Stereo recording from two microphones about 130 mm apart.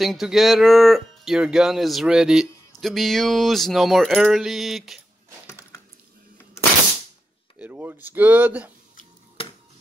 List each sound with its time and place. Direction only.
0.0 s speech: centre (ahead or behind)
7.5 s speech: 10° right (ahead or behind)
9.4 s music: 45° left (ahead or behind)